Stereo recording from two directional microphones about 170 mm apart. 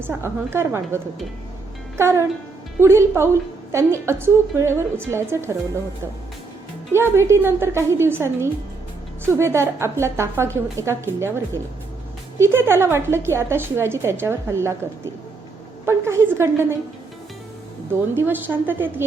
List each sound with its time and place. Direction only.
0.0 s a woman's voice: 15° right (ahead or behind)
6.9 s a woman's voice: 15° right (ahead or behind)
18.1 s a woman's voice: 10° right (ahead or behind)